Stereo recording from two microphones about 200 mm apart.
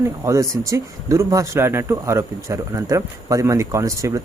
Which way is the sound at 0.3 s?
15° right (ahead or behind).